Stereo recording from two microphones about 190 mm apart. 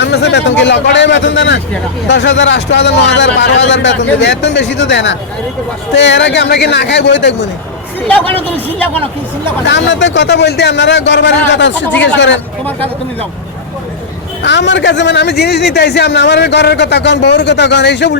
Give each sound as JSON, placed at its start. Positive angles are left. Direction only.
{"t": 0.0, "sound": "a man's voice", "side_deg": 65}
{"t": 9.6, "sound": "a man's voice", "side_deg": 70}
{"t": 14.4, "sound": "a man's voice", "side_deg": 65}